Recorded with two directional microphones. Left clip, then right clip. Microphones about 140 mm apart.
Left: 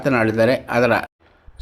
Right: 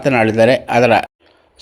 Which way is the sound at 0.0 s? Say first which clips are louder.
Right 5 dB; 10° right (ahead or behind).